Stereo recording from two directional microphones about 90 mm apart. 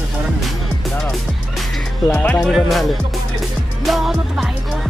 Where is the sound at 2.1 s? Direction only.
20° left (ahead or behind).